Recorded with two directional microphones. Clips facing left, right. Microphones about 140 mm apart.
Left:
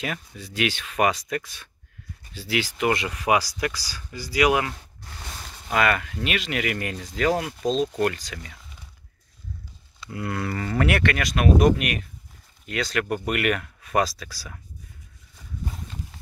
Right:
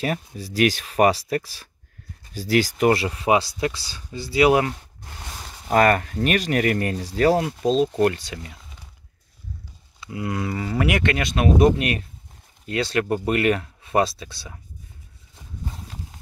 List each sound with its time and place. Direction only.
0.0 s speech: 35° right (ahead or behind)
7.6 s speech: 5° right (ahead or behind)
7.9 s speech: 25° right (ahead or behind)
10.0 s speech: 15° right (ahead or behind)